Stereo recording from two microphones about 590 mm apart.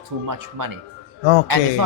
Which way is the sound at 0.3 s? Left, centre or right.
Right.